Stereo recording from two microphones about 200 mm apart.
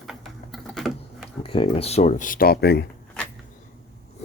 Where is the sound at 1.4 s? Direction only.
25° left (ahead or behind); by 2.8 s 55° left (ahead or behind).